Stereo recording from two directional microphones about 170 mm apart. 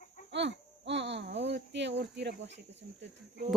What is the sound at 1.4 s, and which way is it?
Speech, 90° right.